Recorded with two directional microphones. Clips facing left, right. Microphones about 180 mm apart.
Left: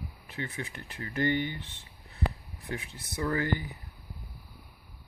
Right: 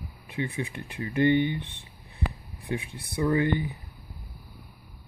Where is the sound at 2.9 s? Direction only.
20° right (ahead or behind).